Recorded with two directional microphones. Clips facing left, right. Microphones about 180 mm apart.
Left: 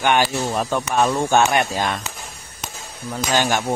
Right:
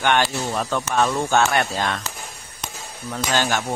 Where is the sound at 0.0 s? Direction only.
10° left (ahead or behind).